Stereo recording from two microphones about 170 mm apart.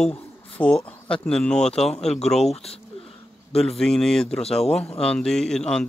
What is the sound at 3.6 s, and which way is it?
Speech, centre (ahead or behind).